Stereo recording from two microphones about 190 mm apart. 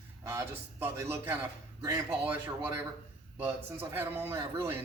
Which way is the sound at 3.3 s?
10° right (ahead or behind).